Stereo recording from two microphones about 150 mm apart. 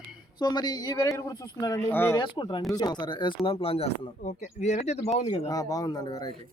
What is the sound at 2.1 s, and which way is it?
Speech, 30° left (ahead or behind).